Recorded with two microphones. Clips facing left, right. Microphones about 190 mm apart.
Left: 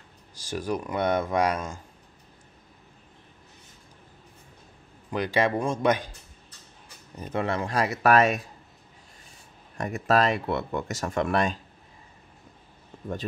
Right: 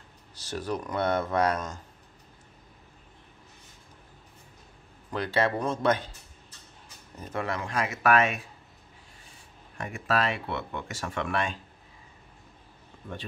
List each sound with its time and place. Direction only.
0.4 s speech: 10° left (ahead or behind)
5.1 s speech: 15° left (ahead or behind)
7.2 s speech: 20° left (ahead or behind); by 8.4 s 40° left (ahead or behind)
9.8 s speech: 40° left (ahead or behind)